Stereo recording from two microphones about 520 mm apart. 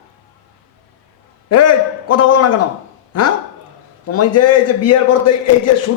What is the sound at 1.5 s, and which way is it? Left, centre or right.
A man's voice, left.